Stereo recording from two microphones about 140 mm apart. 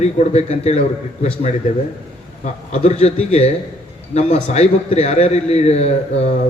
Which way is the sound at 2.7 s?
55° left (ahead or behind).